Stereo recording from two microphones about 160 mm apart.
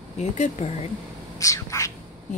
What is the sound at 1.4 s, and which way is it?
Whispering, 20° left (ahead or behind).